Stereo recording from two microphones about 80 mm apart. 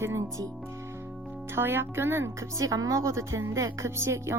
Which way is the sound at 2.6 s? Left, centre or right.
Right.